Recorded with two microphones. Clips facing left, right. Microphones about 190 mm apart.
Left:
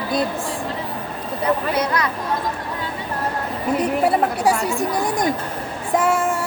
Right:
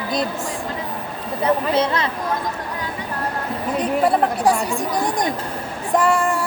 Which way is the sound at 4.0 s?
5° left (ahead or behind).